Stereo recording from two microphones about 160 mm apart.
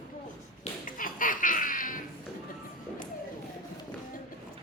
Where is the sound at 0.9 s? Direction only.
60° left (ahead or behind).